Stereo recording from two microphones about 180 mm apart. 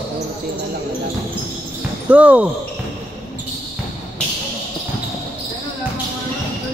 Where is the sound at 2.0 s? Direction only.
5° right (ahead or behind).